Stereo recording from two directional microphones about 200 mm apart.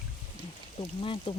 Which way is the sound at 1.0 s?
25° left (ahead or behind).